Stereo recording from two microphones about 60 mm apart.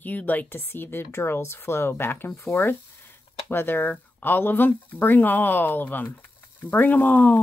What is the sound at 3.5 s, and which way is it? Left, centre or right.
A woman's voice, left.